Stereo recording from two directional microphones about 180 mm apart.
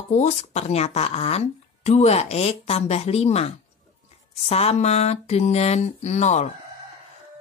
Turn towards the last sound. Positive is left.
turn(degrees=40)  # may be behind; listen again after turning